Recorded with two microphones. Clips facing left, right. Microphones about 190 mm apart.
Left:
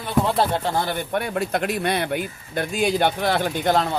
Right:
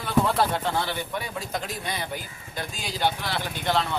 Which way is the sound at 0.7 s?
50° left (ahead or behind).